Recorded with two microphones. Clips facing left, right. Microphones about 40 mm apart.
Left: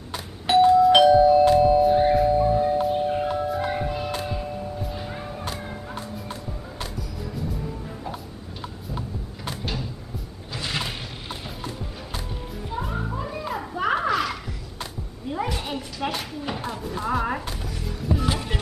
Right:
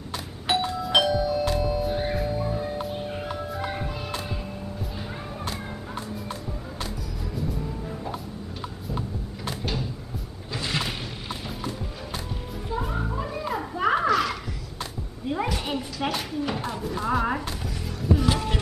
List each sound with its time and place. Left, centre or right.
0.5 s doorbell: centre
1.1 s music: centre
1.9 s music: centre
8.8 s a sound: centre
12.7 s children playing: centre
15.4 s a sound: centre
18.3 s music: centre